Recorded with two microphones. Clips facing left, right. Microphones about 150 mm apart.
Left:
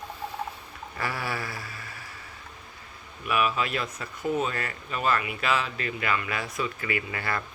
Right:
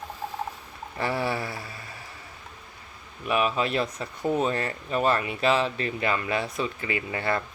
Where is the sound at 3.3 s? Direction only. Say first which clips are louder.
Right 2 dB; 30° right (ahead or behind).